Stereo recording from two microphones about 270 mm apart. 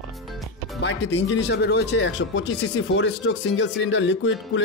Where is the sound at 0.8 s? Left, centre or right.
Left.